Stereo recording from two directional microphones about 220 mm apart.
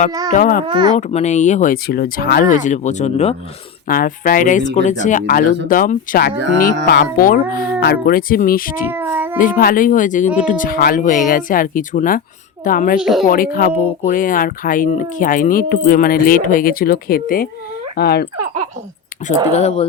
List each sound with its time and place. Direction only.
0.3 s speech: 40° left (ahead or behind)
0.7 s speech: 20° right (ahead or behind)
0.9 s speech: 30° left (ahead or behind)
8.9 s child singing: 10° right (ahead or behind)
9.4 s speech: 40° left (ahead or behind)
13.0 s speech: centre (ahead or behind)
13.2 s speech: 40° left (ahead or behind)
19.2 s speech: 35° left (ahead or behind)